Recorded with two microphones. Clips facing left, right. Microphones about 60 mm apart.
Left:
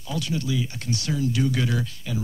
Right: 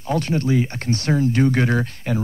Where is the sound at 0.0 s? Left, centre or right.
Right.